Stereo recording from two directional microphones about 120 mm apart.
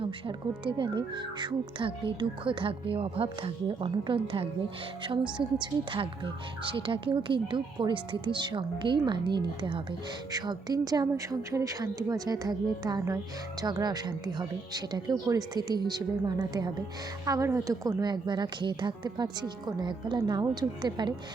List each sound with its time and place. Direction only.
0.0 s a woman's voice: 45° right (ahead or behind)